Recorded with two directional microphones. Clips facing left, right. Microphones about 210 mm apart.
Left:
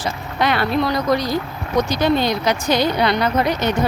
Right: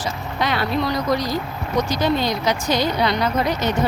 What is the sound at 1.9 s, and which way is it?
Speech, 60° left (ahead or behind).